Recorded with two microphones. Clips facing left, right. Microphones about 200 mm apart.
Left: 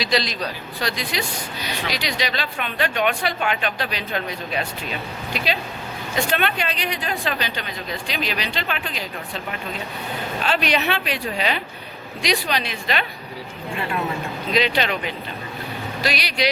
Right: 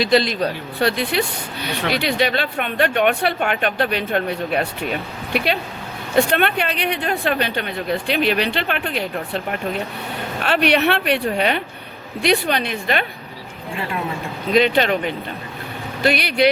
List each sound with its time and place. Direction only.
0.0 s a woman's voice: 55° right (ahead or behind)
14.5 s a woman's voice: 50° right (ahead or behind)